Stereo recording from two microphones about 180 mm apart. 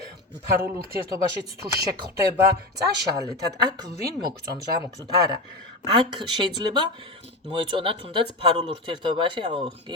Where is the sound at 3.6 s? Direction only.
20° right (ahead or behind).